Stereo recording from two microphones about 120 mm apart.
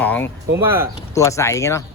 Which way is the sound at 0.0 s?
15° left (ahead or behind).